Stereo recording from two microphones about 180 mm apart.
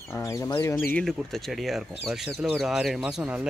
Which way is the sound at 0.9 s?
5° left (ahead or behind).